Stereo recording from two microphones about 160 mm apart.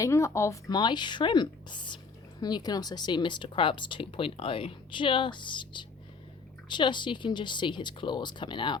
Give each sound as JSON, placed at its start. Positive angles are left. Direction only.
{"t": 0.0, "sound": "speech", "side_deg": 20}